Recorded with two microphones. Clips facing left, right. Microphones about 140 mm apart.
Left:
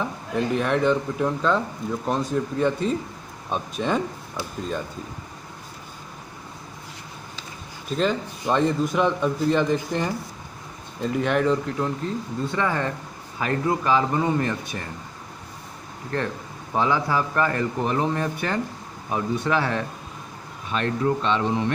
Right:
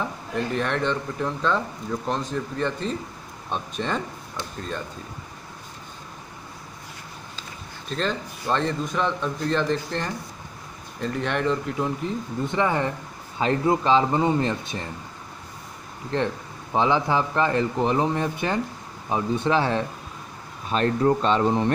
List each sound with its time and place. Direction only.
0.5 s a man's voice: 5° left (ahead or behind)
7.9 s a man's voice: 5° left (ahead or behind)
12.4 s speech: 20° right (ahead or behind)
16.1 s speech: 20° right (ahead or behind)
20.7 s speech: 35° right (ahead or behind)